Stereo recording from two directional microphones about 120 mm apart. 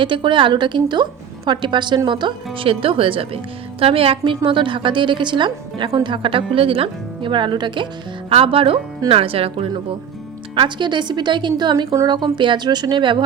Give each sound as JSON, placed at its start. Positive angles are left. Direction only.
{"t": 0.0, "sound": "a woman's voice", "side_deg": -40}
{"t": 10.5, "sound": "a woman's voice", "side_deg": -40}